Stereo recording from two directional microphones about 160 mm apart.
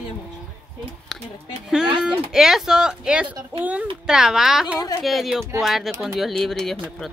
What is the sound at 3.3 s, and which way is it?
Speech, 30° right (ahead or behind).